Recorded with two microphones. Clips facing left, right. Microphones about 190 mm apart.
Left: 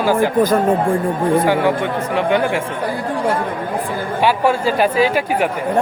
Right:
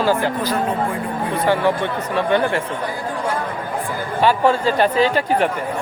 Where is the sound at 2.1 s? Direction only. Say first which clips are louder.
Left 1 dB; 15° left (ahead or behind).